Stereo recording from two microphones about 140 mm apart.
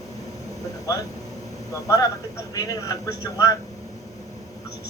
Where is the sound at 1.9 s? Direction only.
25° left (ahead or behind).